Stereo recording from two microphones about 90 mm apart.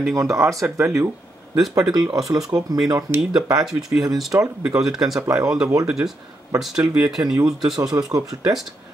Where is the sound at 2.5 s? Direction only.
40° right (ahead or behind).